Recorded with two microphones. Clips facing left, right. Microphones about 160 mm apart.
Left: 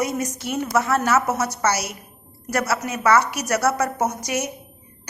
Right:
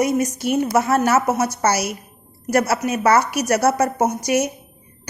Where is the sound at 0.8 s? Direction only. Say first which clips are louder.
Right 1 dB; 30° right (ahead or behind).